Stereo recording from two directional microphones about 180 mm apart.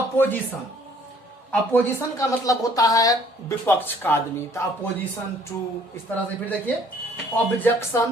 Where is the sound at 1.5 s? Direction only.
10° left (ahead or behind).